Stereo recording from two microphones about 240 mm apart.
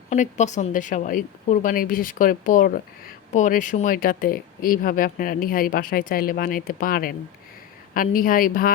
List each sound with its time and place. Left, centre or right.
0.1 s speech: left